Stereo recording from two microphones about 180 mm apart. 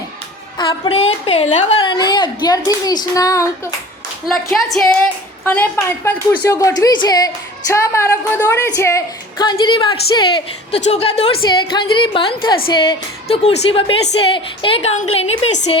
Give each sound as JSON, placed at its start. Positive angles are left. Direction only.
{"t": 0.6, "sound": "a woman's voice", "side_deg": 30}
{"t": 1.8, "sound": "a woman's voice", "side_deg": 25}
{"t": 4.5, "sound": "a woman's voice", "side_deg": 0}